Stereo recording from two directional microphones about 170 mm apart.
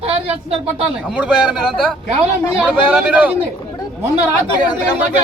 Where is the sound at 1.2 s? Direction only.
5° right (ahead or behind).